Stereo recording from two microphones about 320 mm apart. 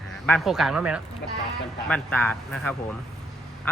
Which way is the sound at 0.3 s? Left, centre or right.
Centre.